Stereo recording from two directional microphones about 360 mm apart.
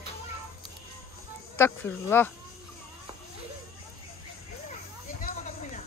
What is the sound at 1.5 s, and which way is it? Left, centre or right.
Speech, centre.